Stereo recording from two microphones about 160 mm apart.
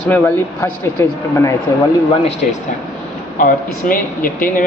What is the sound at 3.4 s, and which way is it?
Speech, 60° left (ahead or behind).